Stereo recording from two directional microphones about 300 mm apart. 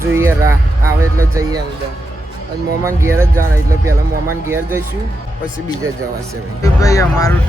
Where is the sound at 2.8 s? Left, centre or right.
Centre.